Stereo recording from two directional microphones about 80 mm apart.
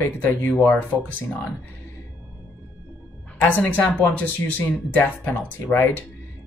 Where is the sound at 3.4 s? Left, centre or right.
Centre.